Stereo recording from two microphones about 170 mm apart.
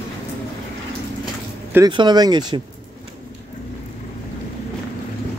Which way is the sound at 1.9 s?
25° right (ahead or behind).